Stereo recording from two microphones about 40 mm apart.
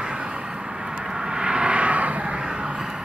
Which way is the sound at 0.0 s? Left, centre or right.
Right.